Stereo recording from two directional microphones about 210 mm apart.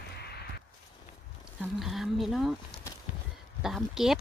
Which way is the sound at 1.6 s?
Centre (ahead or behind).